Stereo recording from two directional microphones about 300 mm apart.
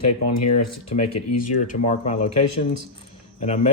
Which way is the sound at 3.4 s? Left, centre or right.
Left.